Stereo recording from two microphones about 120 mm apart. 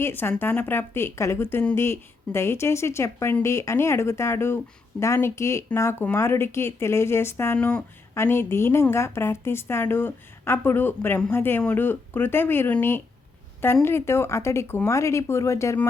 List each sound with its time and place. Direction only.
0.0 s a woman's voice: 20° left (ahead or behind)